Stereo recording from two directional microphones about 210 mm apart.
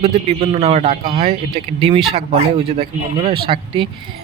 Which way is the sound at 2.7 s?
30° right (ahead or behind).